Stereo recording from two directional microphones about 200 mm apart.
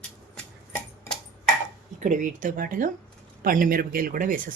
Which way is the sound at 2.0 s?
40° right (ahead or behind).